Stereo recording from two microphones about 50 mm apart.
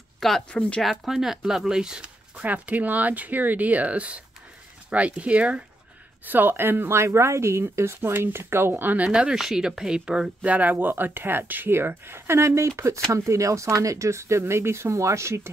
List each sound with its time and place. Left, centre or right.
0.5 s speech: left
0.8 s speech: centre
2.4 s speech: right
6.2 s speech: right
8.9 s speech: right
10.4 s speech: right
14.4 s speech: right